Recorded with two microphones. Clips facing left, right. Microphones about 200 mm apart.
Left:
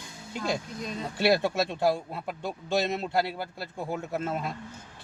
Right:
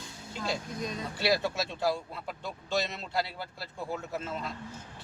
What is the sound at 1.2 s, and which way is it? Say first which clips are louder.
A man's voice: left 5 dB; 55° left (ahead or behind).